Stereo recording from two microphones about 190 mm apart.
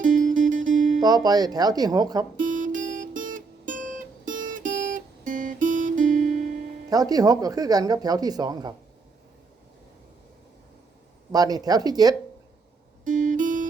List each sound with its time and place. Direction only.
0.0 s music: 45° right (ahead or behind)
1.0 s speech: 20° right (ahead or behind)
2.3 s music: 40° right (ahead or behind)
6.9 s speech: 20° right (ahead or behind)
11.3 s speech: 20° right (ahead or behind)
13.1 s music: 45° right (ahead or behind)